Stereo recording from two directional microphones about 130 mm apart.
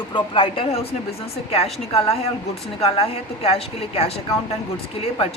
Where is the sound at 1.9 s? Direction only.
50° left (ahead or behind).